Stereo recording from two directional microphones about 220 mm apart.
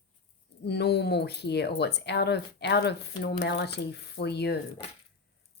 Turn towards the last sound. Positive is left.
turn(degrees=50)  # may be behind; listen again after turning